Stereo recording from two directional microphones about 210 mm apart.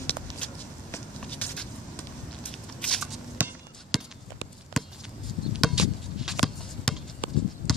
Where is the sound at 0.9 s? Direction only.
5° left (ahead or behind).